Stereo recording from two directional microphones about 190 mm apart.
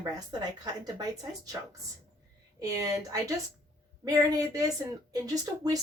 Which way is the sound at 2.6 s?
20° right (ahead or behind).